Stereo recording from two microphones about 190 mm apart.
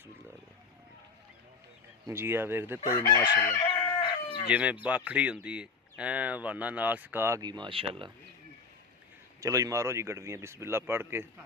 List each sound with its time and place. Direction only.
2.0 s speech: 10° right (ahead or behind)
2.8 s chicken: 15° left (ahead or behind)
4.4 s speech: 5° right (ahead or behind); by 8.1 s 30° right (ahead or behind)
9.4 s speech: 15° right (ahead or behind)